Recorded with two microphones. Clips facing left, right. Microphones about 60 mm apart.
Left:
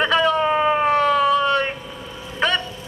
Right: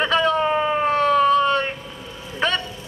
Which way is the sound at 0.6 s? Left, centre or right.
Centre.